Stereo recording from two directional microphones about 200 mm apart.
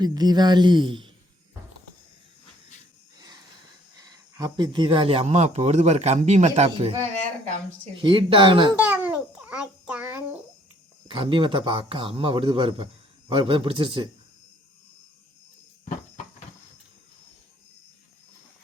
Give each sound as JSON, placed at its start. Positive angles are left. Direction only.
{"t": 0.0, "sound": "speech", "side_deg": -20}
{"t": 4.1, "sound": "speech", "side_deg": -20}
{"t": 7.9, "sound": "speech", "side_deg": -25}
{"t": 8.8, "sound": "babbling", "side_deg": -10}
{"t": 11.1, "sound": "speech", "side_deg": -25}